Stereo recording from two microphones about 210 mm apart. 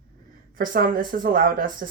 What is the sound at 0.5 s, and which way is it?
Speech, 40° right (ahead or behind).